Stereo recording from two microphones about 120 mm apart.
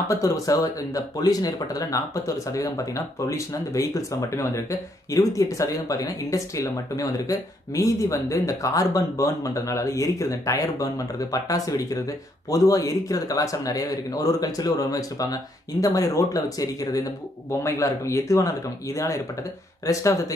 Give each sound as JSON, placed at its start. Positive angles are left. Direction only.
{"t": 0.1, "sound": "speech", "side_deg": 30}